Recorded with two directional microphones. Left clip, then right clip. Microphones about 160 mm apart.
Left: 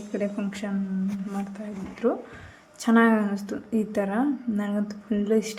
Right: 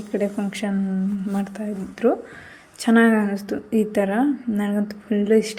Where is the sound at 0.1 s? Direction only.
25° right (ahead or behind).